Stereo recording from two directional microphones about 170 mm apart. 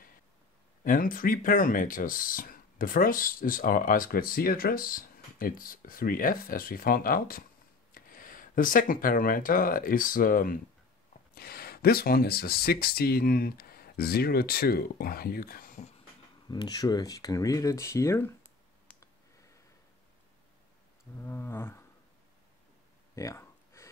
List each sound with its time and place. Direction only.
0.8 s speech: 55° left (ahead or behind)
16.4 s speech: 25° left (ahead or behind)
21.2 s roaring cats: 15° left (ahead or behind)
23.1 s a sound: 20° left (ahead or behind)